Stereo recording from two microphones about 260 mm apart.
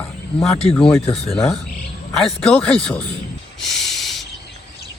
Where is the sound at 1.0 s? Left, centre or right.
Left.